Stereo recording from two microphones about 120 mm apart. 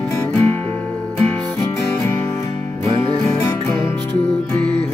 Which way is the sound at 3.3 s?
25° left (ahead or behind).